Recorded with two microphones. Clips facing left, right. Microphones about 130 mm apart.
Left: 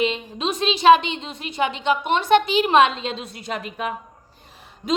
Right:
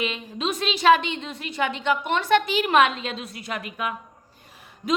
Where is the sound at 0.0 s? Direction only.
25° left (ahead or behind).